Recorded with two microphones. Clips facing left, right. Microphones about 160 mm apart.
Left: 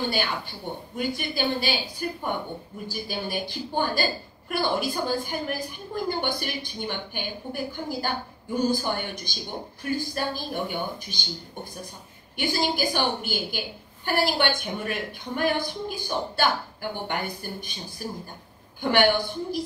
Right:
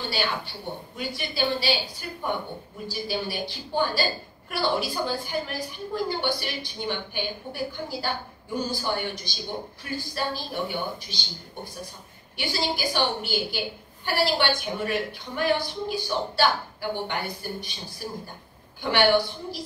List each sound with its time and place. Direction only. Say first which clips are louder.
0.1 s a woman's voice: even; 50° left (ahead or behind)